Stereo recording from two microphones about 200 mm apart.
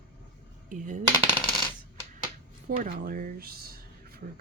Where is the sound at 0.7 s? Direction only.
40° right (ahead or behind).